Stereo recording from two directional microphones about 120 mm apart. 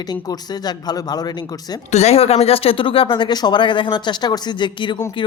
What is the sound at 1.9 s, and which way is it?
Speech, 65° left (ahead or behind).